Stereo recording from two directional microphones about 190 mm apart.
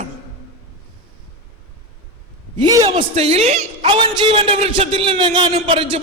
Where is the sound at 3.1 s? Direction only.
35° right (ahead or behind).